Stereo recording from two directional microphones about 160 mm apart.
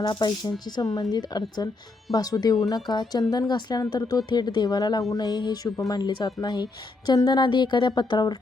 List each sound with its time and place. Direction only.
0.0 s speech: 25° left (ahead or behind)